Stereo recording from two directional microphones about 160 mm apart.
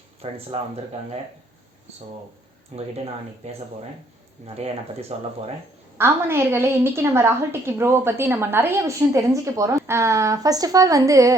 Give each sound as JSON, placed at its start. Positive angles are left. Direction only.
{"t": 0.2, "sound": "speech", "side_deg": -40}
{"t": 2.7, "sound": "speech", "side_deg": -40}
{"t": 6.0, "sound": "a woman's voice", "side_deg": -15}